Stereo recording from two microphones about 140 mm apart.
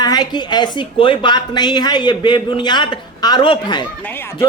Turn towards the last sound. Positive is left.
turn(degrees=35)  # may be behind; listen again after turning